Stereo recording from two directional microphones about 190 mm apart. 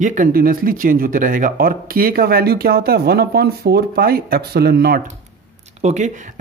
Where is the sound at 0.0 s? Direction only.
45° right (ahead or behind).